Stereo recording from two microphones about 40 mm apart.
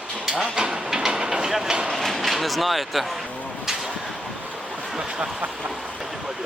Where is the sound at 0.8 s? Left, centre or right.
Centre.